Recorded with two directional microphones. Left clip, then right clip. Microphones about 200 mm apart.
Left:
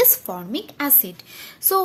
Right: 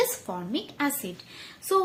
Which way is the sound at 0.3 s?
35° left (ahead or behind).